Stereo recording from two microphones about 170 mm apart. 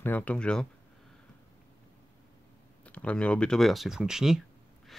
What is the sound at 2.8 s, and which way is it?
Speech, 5° left (ahead or behind).